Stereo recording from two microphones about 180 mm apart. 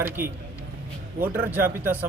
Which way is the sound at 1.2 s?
10° right (ahead or behind).